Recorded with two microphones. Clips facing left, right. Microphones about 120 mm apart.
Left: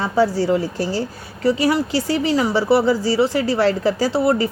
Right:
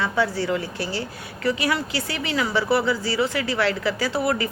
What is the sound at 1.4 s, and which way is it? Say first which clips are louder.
A woman's voice: left 6 dB; 30° left (ahead or behind).